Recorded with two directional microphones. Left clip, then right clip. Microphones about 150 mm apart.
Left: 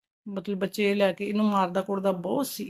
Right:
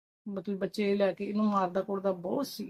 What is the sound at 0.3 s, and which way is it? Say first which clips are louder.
Speech: left 5 dB; 5° left (ahead or behind).